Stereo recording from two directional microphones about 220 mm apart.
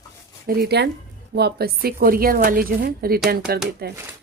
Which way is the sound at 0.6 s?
50° right (ahead or behind).